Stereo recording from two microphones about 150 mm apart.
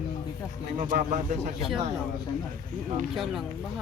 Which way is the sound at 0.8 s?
55° right (ahead or behind).